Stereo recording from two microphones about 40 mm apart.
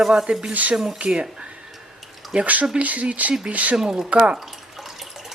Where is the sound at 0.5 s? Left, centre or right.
Right.